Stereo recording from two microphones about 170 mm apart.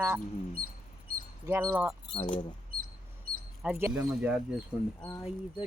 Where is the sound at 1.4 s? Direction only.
15° right (ahead or behind).